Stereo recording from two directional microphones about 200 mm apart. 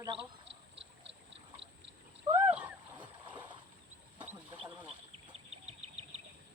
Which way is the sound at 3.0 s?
25° right (ahead or behind).